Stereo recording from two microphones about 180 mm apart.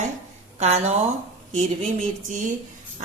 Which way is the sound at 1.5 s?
45° right (ahead or behind).